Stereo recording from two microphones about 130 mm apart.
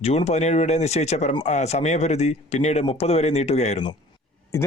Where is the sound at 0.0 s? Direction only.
55° left (ahead or behind).